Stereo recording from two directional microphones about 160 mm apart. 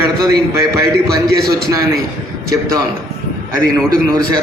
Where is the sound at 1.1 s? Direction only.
5° left (ahead or behind).